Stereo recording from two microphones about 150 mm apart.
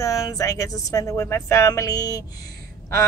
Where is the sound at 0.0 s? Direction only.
20° left (ahead or behind).